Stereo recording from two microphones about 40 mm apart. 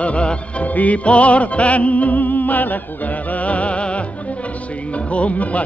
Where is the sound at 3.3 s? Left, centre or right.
Left.